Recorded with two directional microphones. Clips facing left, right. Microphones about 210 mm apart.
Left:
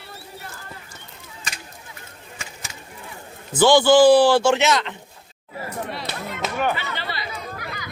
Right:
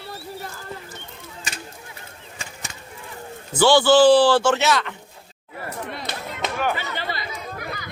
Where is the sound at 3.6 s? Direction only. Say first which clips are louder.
Left 1 dB; 15° left (ahead or behind).